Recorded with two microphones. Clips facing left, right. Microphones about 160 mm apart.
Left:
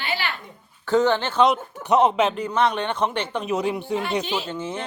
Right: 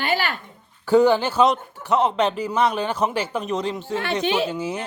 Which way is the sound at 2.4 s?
5° right (ahead or behind).